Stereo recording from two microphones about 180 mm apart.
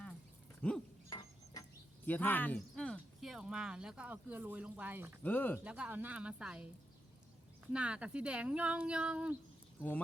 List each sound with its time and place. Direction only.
0.6 s speech: 10° left (ahead or behind)
1.1 s a sound: 20° left (ahead or behind)
2.0 s speech: 10° left (ahead or behind); by 5.2 s 10° right (ahead or behind)
5.2 s speech: 10° left (ahead or behind)
5.6 s speech: 5° right (ahead or behind)
7.7 s speech: 5° right (ahead or behind)